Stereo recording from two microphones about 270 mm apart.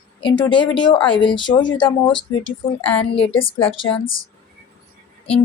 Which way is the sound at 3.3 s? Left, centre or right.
Centre.